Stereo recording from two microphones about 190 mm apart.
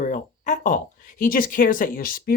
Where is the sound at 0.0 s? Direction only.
40° left (ahead or behind).